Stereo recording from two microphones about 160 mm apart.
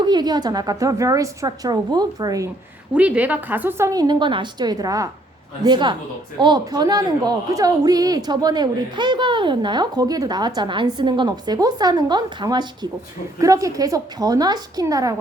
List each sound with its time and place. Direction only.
0.0 s a woman's voice: 25° right (ahead or behind)
2.9 s a woman's voice: 10° right (ahead or behind)